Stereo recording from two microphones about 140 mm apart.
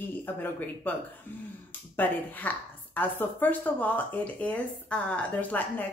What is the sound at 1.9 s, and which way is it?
Speech, 15° left (ahead or behind).